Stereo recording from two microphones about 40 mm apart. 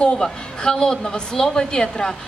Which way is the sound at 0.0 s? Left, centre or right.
Centre.